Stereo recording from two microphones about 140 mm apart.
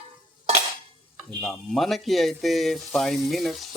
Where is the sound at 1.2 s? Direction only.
Centre (ahead or behind).